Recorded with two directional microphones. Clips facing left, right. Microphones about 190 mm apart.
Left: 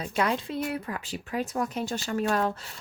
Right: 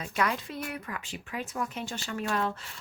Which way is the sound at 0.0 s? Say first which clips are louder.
Left 3 dB; 30° left (ahead or behind).